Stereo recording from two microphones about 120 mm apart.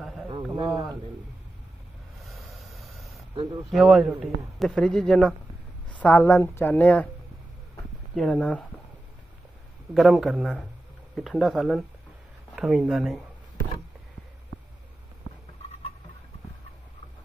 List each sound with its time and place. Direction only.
0.0 s a sound: centre (ahead or behind)
0.7 s a man's voice: 25° right (ahead or behind)
2.1 s snort: centre (ahead or behind)
3.7 s a man's voice: 5° right (ahead or behind); by 7.1 s 15° left (ahead or behind)
8.1 s a woman's voice: 5° left (ahead or behind)
9.9 s a man's voice: centre (ahead or behind)